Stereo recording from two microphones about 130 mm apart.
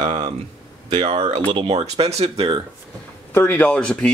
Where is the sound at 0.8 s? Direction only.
40° right (ahead or behind).